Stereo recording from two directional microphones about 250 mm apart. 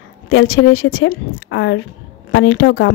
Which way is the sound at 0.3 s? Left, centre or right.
Left.